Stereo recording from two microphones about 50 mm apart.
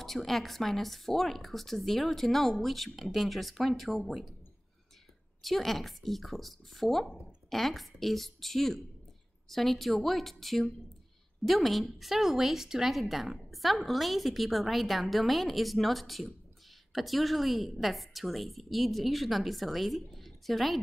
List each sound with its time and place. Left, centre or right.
0.0 s a woman's voice: centre
5.4 s a woman's voice: centre